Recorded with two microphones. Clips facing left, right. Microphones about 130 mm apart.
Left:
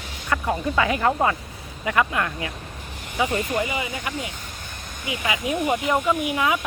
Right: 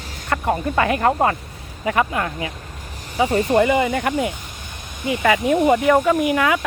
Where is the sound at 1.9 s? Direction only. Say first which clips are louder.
Right 2 dB; 30° right (ahead or behind).